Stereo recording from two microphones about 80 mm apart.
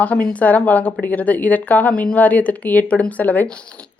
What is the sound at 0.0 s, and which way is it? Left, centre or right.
Speech, centre.